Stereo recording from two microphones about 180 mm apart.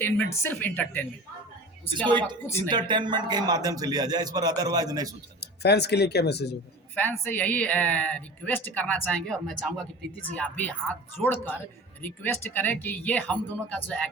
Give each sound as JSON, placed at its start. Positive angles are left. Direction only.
{"t": 0.0, "sound": "a woman's voice", "side_deg": 10}
{"t": 2.0, "sound": "a man's voice", "side_deg": -25}
{"t": 5.4, "sound": "speech", "side_deg": 65}
{"t": 6.9, "sound": "a woman's voice", "side_deg": 10}